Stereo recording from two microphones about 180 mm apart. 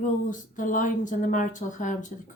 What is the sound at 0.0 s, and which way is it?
Speech, 45° left (ahead or behind).